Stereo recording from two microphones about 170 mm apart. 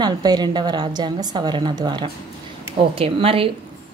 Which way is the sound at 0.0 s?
25° right (ahead or behind).